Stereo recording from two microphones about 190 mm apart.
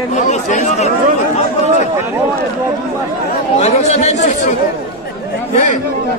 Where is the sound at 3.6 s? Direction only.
35° left (ahead or behind).